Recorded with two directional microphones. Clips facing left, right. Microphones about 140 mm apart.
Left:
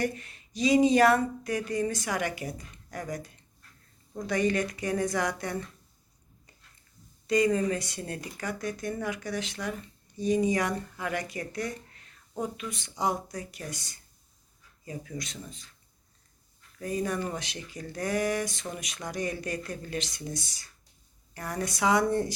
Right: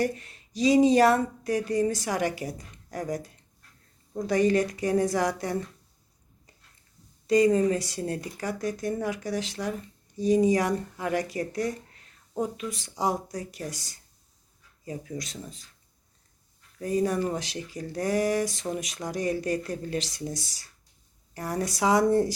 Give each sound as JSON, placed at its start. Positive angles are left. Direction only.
{"t": 0.0, "sound": "speech", "side_deg": -35}
{"t": 7.3, "sound": "speech", "side_deg": -35}
{"t": 16.7, "sound": "speech", "side_deg": -30}